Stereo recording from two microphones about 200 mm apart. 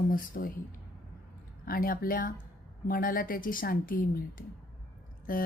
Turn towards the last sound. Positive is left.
turn(degrees=45)  # may be behind; listen again after turning